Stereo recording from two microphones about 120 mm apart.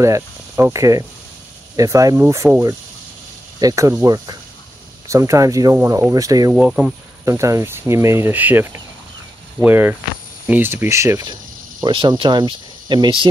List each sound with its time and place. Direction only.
0.0 s speech: 25° right (ahead or behind)
3.5 s speech: 30° right (ahead or behind)
11.8 s speech: 40° right (ahead or behind)